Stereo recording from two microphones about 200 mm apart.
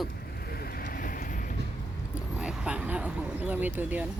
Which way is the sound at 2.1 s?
5° right (ahead or behind).